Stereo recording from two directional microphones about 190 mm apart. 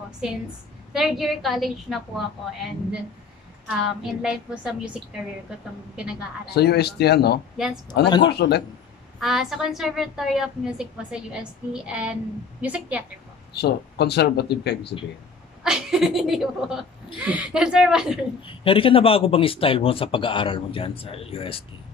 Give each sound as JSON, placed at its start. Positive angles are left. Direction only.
{"t": 0.9, "sound": "a woman's voice", "side_deg": 0}
{"t": 3.6, "sound": "a woman's voice", "side_deg": -5}
{"t": 6.5, "sound": "speech", "side_deg": 60}
{"t": 7.5, "sound": "a woman's voice", "side_deg": 0}
{"t": 8.3, "sound": "speech", "side_deg": 60}
{"t": 9.2, "sound": "a woman's voice", "side_deg": 0}
{"t": 13.6, "sound": "speech", "side_deg": 60}
{"t": 15.6, "sound": "a woman's voice", "side_deg": 0}
{"t": 18.4, "sound": "speech", "side_deg": 30}